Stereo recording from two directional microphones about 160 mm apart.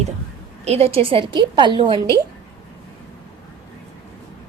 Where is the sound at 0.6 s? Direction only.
40° right (ahead or behind).